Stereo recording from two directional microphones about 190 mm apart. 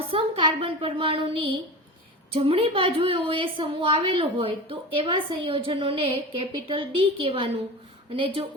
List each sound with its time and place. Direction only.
0.1 s a woman's voice: 30° right (ahead or behind)